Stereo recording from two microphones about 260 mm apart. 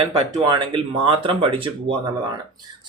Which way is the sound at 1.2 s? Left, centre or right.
Right.